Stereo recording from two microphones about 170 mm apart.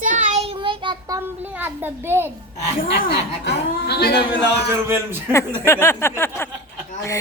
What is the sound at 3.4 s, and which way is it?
Speech, 70° left (ahead or behind).